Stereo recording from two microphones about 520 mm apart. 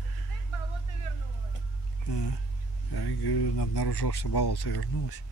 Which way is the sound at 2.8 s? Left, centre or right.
Left.